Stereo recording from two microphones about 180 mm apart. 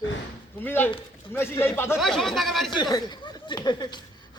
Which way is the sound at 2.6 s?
25° left (ahead or behind).